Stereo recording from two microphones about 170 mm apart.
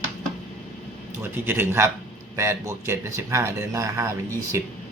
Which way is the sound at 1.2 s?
15° right (ahead or behind).